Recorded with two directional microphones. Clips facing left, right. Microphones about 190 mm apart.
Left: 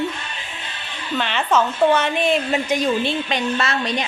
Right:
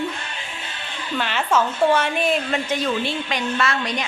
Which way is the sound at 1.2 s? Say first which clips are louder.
Left 1 dB; 5° right (ahead or behind).